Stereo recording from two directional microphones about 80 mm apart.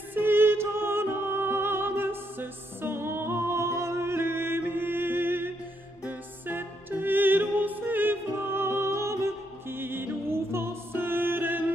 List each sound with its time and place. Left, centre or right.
0.1 s music: right